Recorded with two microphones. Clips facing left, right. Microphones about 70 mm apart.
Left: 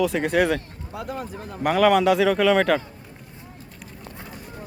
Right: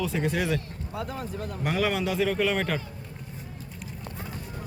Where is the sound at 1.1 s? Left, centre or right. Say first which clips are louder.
Left 2 dB; left.